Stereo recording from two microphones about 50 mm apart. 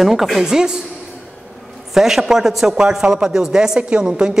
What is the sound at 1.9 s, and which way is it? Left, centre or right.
A man's voice, centre.